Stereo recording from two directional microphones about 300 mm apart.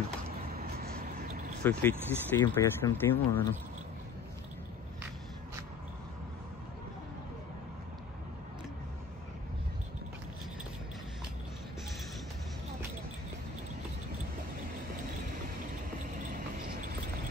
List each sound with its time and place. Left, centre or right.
0.6 s vehicle: right
1.6 s speech: centre